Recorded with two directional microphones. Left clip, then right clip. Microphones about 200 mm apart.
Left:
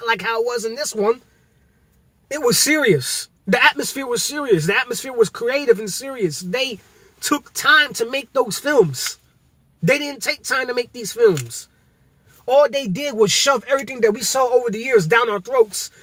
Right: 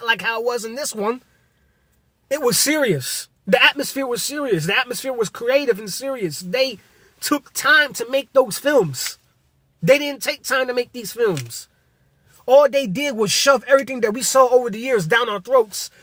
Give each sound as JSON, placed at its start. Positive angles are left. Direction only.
{"t": 0.0, "sound": "speech", "side_deg": -25}
{"t": 2.3, "sound": "speech", "side_deg": -25}
{"t": 12.5, "sound": "speech", "side_deg": -30}